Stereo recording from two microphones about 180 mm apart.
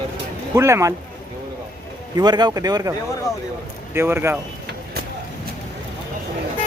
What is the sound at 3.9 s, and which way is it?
Speech, 15° right (ahead or behind).